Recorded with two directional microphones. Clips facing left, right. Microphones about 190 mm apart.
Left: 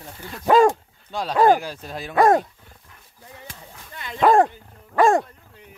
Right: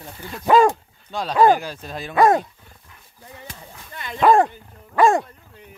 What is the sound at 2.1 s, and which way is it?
Speech, 50° left (ahead or behind).